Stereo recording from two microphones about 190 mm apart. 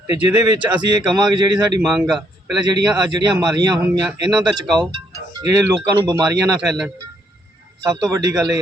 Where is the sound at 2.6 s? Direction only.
20° right (ahead or behind).